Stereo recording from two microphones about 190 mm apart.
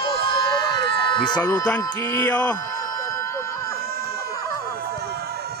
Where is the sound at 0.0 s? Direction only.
25° left (ahead or behind).